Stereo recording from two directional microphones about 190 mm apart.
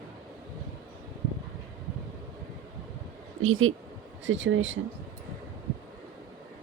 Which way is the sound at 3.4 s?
90° right.